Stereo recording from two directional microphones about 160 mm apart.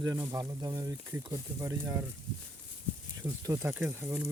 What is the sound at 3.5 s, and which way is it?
Speech, 15° right (ahead or behind).